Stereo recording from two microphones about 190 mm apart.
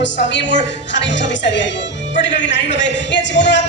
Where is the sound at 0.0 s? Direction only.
70° left (ahead or behind).